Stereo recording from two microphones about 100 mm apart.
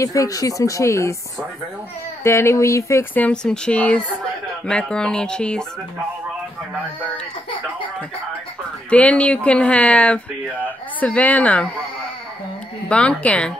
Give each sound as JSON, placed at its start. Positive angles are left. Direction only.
{"t": 0.0, "sound": "speech", "side_deg": 35}
{"t": 2.2, "sound": "speech", "side_deg": 25}
{"t": 3.2, "sound": "speech", "side_deg": 10}
{"t": 8.9, "sound": "speech", "side_deg": 15}
{"t": 12.8, "sound": "speech", "side_deg": 10}